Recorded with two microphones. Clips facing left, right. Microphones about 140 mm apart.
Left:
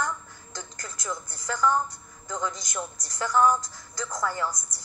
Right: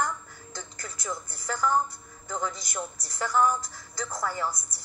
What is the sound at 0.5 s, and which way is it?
Speech, 25° right (ahead or behind).